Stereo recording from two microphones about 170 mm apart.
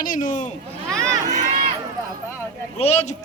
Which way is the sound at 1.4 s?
55° right (ahead or behind).